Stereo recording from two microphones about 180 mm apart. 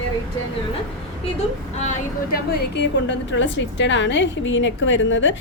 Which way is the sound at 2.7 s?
80° left.